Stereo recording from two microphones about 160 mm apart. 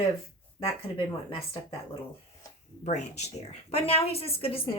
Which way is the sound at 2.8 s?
45° left (ahead or behind).